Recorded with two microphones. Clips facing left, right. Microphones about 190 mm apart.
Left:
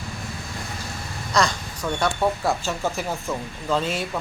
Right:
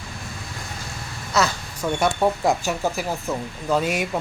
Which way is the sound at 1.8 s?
20° right (ahead or behind).